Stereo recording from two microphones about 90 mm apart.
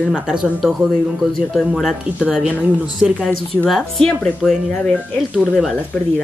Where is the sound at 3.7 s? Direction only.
5° left (ahead or behind).